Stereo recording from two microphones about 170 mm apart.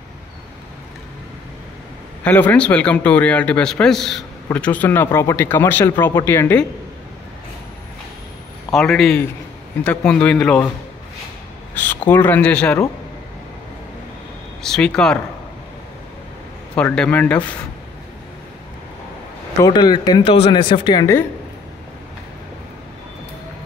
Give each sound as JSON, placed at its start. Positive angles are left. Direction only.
{"t": 2.2, "sound": "speech", "side_deg": 10}
{"t": 8.7, "sound": "speech", "side_deg": 0}
{"t": 11.7, "sound": "speech", "side_deg": 10}
{"t": 14.6, "sound": "speech", "side_deg": 5}
{"t": 16.7, "sound": "speech", "side_deg": 5}
{"t": 19.6, "sound": "speech", "side_deg": 25}